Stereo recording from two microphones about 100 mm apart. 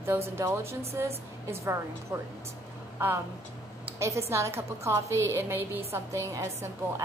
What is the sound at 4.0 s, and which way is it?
A woman's voice, 30° right (ahead or behind).